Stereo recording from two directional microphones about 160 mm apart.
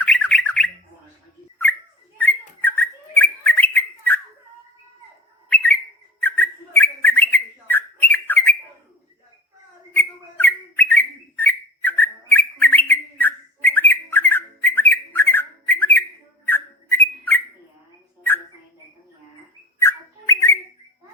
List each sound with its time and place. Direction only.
0.0 s squawk: 10° left (ahead or behind)
1.7 s bird: 10° left (ahead or behind)
5.5 s bird: 10° left (ahead or behind)
9.9 s bird: 15° left (ahead or behind)
16.5 s whistling: 15° left (ahead or behind)
19.8 s bird: 15° left (ahead or behind)